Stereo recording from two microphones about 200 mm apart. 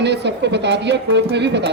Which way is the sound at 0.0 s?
60° right (ahead or behind).